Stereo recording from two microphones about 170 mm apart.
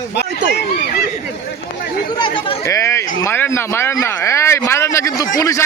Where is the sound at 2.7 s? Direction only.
15° left (ahead or behind).